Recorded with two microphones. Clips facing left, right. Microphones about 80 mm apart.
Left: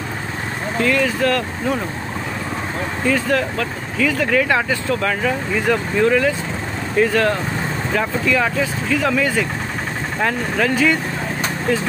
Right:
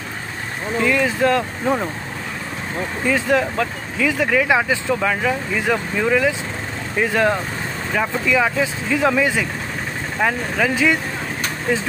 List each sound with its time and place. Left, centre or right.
0.8 s speech: centre
3.1 s speech: centre